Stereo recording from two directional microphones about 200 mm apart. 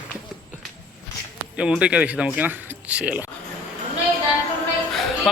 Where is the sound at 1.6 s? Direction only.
5° right (ahead or behind).